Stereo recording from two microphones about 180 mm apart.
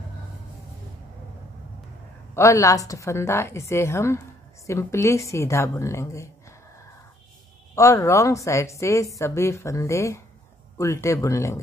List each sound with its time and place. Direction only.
2.3 s a woman's voice: 15° left (ahead or behind)
7.7 s a woman's voice: 15° left (ahead or behind)